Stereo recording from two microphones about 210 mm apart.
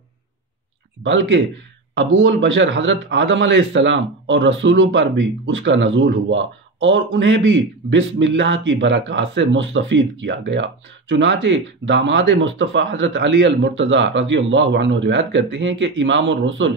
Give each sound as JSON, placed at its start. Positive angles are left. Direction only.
{"t": 1.0, "sound": "a man's voice", "side_deg": -60}